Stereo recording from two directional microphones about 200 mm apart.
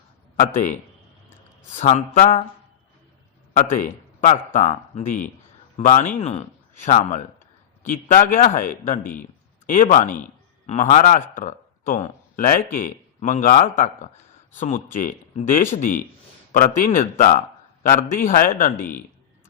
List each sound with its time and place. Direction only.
1.7 s speech: 35° left (ahead or behind)
3.8 s speech: 40° left (ahead or behind)